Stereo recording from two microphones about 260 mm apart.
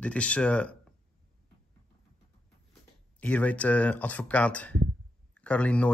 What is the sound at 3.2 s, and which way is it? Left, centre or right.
Speech, centre.